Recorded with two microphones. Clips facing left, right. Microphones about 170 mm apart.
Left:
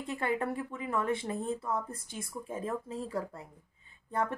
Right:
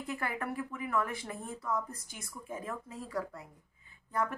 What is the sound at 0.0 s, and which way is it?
Speech, 25° left (ahead or behind).